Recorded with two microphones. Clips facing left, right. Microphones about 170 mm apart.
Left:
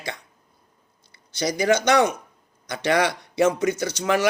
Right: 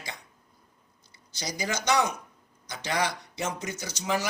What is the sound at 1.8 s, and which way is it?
Speech, 60° left (ahead or behind).